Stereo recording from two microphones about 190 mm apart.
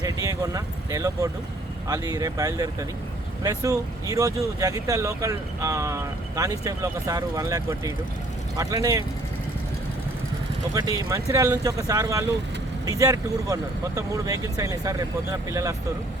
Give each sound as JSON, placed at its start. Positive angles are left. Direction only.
{"t": 0.0, "sound": "speech", "side_deg": -20}
{"t": 10.8, "sound": "speech", "side_deg": -20}